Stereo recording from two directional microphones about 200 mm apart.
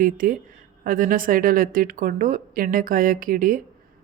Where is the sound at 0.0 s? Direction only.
45° right (ahead or behind).